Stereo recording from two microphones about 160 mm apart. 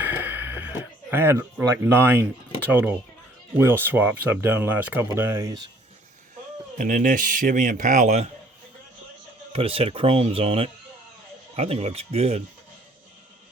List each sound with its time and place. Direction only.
0.0 s speech: 10° right (ahead or behind)
6.7 s a man's voice: 55° right (ahead or behind)
9.5 s speech: 35° right (ahead or behind)